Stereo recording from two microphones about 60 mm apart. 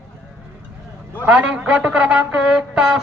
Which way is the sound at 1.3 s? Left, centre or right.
Right.